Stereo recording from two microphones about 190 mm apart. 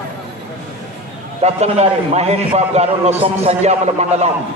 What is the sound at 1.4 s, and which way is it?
A man's voice, 35° right (ahead or behind).